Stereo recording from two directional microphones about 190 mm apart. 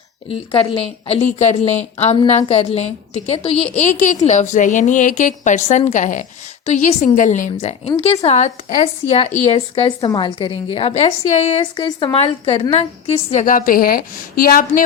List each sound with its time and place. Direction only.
0.3 s a woman's voice: 30° left (ahead or behind)
10.0 s a woman's voice: 20° left (ahead or behind); by 14.8 s 50° left (ahead or behind)